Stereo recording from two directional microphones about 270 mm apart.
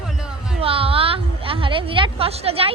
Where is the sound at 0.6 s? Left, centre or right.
Right.